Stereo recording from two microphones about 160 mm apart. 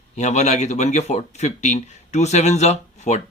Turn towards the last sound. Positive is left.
turn(degrees=45)  # may be behind; listen again after turning